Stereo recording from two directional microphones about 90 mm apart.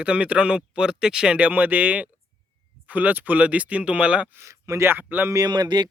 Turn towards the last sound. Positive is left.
turn(degrees=-55)  # may be behind; listen again after turning